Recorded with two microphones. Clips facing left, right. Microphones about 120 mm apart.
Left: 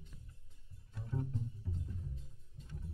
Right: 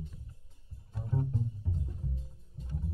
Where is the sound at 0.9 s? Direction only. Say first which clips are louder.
Right 6 dB; 35° right (ahead or behind).